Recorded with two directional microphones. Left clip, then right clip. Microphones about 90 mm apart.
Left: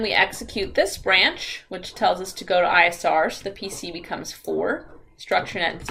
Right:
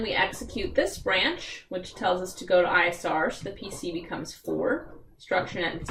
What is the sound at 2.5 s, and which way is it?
Speech, 20° left (ahead or behind).